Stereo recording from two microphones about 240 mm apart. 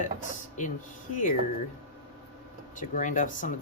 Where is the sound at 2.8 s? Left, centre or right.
Left.